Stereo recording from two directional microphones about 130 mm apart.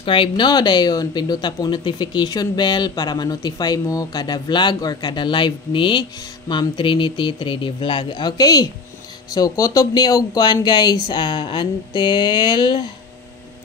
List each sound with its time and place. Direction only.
0.0 s speech: 45° left (ahead or behind)